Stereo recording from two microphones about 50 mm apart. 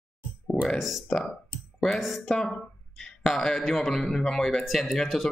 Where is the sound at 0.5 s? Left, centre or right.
Centre.